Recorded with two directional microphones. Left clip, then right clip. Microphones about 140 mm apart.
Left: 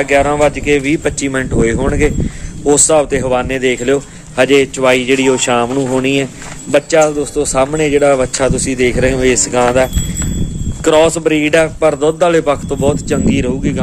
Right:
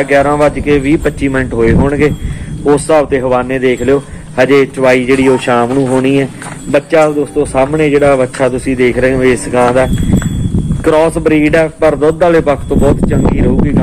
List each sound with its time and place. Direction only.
0.0 s a man's voice: 20° left (ahead or behind)